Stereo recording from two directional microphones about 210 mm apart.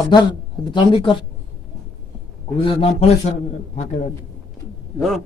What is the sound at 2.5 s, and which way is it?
A man's voice, 25° left (ahead or behind).